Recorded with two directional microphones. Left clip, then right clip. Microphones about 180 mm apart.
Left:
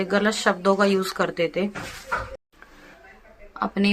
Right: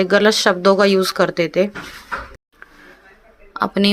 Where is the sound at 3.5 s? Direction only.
40° right (ahead or behind).